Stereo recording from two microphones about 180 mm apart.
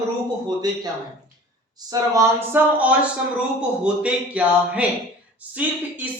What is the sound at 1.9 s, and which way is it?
A woman's voice, 20° right (ahead or behind).